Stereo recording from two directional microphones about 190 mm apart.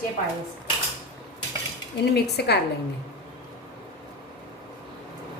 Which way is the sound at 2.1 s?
60° left (ahead or behind).